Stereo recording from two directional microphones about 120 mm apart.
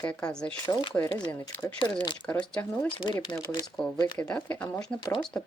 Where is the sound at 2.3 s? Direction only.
10° left (ahead or behind).